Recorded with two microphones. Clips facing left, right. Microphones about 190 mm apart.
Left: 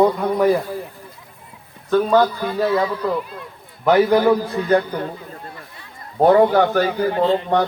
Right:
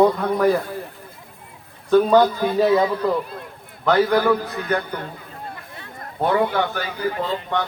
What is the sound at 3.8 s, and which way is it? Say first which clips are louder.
Speech: left 3 dB; 15° left (ahead or behind).